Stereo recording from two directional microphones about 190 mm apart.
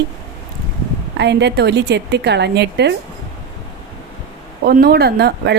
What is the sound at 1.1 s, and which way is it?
A woman's voice, 65° right (ahead or behind).